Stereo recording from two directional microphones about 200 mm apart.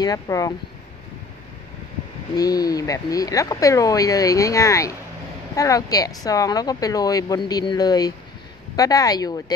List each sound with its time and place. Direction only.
0.0 s speech: 20° left (ahead or behind)
2.3 s speech: 20° left (ahead or behind)